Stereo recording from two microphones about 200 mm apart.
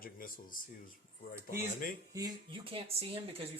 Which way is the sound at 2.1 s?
20° right (ahead or behind).